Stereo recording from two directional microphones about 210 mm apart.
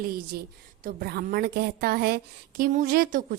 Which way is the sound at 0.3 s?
45° right (ahead or behind).